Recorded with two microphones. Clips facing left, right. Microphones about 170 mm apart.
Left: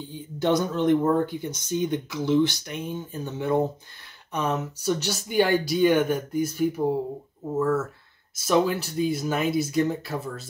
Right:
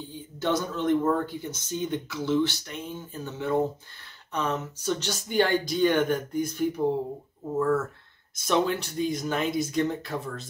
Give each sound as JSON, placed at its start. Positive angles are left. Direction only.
{"t": 0.4, "sound": "speech", "side_deg": 15}